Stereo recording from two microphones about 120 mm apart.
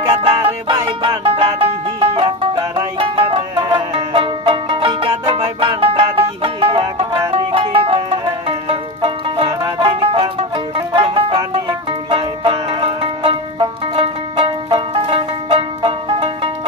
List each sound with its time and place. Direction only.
0.2 s music: 45° right (ahead or behind)
8.5 s banjo: 50° right (ahead or behind)
9.6 s music: 40° right (ahead or behind)